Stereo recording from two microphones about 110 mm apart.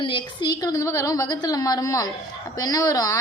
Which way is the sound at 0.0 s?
50° left (ahead or behind).